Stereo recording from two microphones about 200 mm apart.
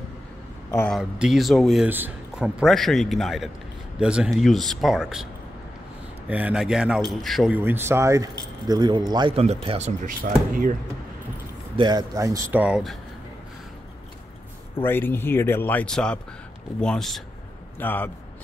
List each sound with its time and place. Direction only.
0.8 s a man's voice: 5° right (ahead or behind); by 10.7 s 45° right (ahead or behind)
11.7 s speech: 20° right (ahead or behind); by 12.9 s 5° right (ahead or behind)
14.8 s a man's voice: 10° left (ahead or behind)